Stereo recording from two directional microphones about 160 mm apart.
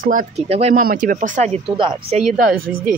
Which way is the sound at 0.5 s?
40° right (ahead or behind).